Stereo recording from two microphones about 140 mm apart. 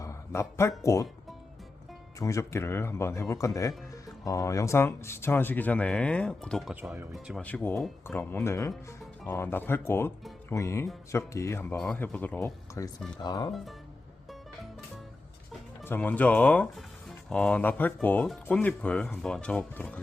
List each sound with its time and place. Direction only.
0.0 s a sound: 20° left (ahead or behind)
0.8 s speech: 20° left (ahead or behind)
2.1 s speech: 20° left (ahead or behind); by 7.4 s centre (ahead or behind)
7.4 s speech: 10° left (ahead or behind)
11.8 s speech: 10° left (ahead or behind)
12.4 s speech: 20° left (ahead or behind)
15.8 s speech: 15° left (ahead or behind)